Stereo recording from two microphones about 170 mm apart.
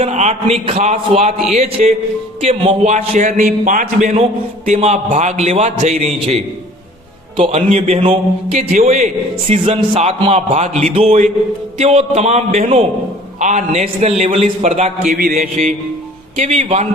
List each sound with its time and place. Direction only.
0.0 s a sound: 40° right (ahead or behind)
0.6 s a man's voice: 40° right (ahead or behind)
15.1 s mantra: 60° right (ahead or behind)
16.4 s a man's voice: 40° right (ahead or behind)